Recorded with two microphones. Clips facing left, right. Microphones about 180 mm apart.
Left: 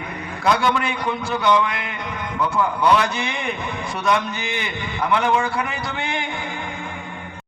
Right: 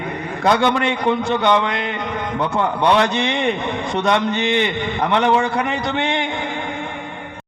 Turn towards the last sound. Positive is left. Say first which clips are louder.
# right 5 dB
turn(degrees=-25)  # may be behind; listen again after turning